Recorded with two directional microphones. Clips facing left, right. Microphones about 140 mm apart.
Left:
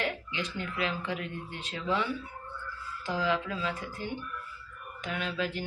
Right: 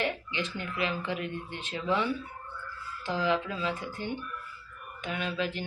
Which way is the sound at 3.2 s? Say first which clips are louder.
Right 2 dB; 15° right (ahead or behind).